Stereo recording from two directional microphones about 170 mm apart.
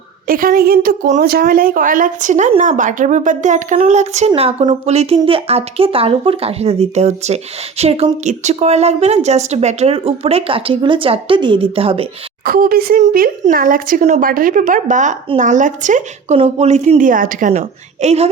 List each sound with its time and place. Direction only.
0.3 s a woman's voice: 55° right (ahead or behind); by 12.0 s 35° right (ahead or behind)
12.5 s a woman's voice: 60° right (ahead or behind); by 18.3 s 40° right (ahead or behind)